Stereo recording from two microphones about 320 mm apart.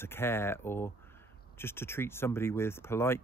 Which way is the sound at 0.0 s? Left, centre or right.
Centre.